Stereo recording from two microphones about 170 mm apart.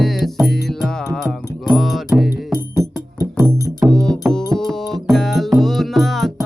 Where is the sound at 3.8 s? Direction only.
5° left (ahead or behind).